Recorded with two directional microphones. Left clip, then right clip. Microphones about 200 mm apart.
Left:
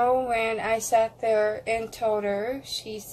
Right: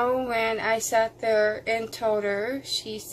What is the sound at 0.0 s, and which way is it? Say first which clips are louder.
Speech: left 1 dB; 15° right (ahead or behind).